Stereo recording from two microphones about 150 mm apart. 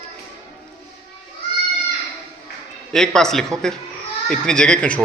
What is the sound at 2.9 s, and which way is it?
A man's voice, 5° left (ahead or behind).